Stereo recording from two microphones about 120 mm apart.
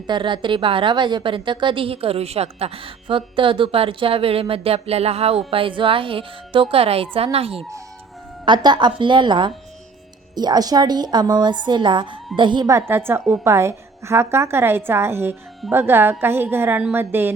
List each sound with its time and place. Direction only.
0.1 s a woman's voice: 40° right (ahead or behind)
8.4 s a woman's voice: 40° right (ahead or behind)
12.9 s a woman's voice: 20° right (ahead or behind)